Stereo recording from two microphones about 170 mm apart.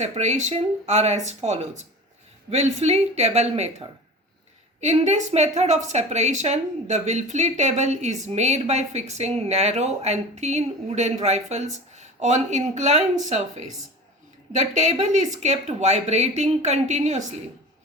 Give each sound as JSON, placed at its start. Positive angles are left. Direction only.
{"t": 0.0, "sound": "a woman's voice", "side_deg": -40}